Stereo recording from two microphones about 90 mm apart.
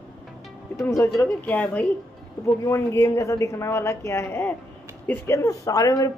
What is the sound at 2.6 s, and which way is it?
Speech, 30° left (ahead or behind).